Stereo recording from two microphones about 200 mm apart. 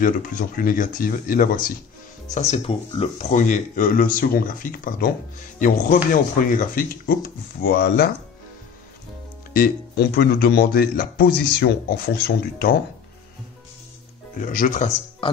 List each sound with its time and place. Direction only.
0.0 s speech: 40° left (ahead or behind)
2.3 s speech: 30° left (ahead or behind); by 8.1 s 50° left (ahead or behind)
9.5 s speech: 50° left (ahead or behind)
14.3 s speech: 45° left (ahead or behind)